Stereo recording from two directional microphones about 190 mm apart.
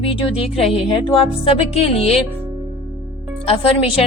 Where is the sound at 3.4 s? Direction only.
30° left (ahead or behind).